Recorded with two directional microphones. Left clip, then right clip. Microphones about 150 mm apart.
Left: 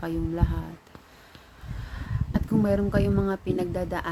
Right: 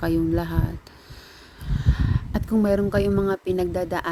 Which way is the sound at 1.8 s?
45° right (ahead or behind).